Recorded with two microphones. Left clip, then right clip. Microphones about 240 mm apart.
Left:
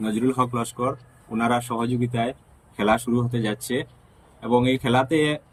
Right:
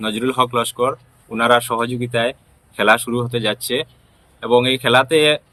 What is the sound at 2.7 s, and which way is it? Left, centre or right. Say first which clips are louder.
Speech: right 7 dB; centre.